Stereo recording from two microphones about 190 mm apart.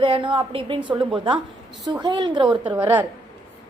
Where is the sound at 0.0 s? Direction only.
25° right (ahead or behind).